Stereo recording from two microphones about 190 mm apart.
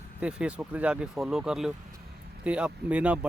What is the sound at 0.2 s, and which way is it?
Speech, 5° right (ahead or behind).